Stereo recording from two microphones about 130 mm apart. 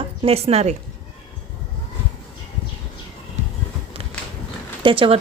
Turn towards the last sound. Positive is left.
turn(degrees=-40)  # may be behind; listen again after turning